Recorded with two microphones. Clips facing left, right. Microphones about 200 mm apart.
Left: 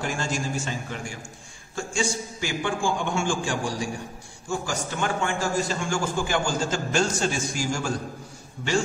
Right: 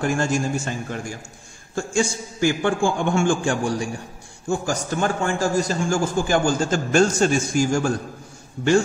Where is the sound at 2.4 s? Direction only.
50° right (ahead or behind).